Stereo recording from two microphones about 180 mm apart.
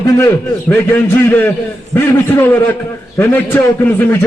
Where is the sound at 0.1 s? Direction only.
15° left (ahead or behind).